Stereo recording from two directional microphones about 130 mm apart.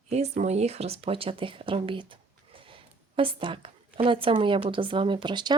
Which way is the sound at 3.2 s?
45° right (ahead or behind).